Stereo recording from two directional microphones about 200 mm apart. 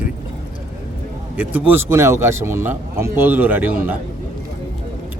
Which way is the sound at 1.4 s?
10° right (ahead or behind).